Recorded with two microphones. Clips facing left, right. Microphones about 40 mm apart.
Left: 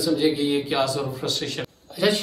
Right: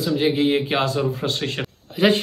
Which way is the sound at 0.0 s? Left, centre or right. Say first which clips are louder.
Right 2 dB; right.